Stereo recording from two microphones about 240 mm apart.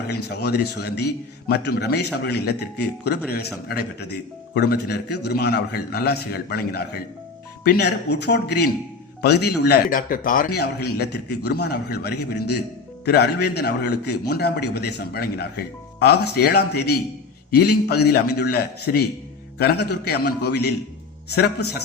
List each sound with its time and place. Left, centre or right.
0.3 s a man's voice: left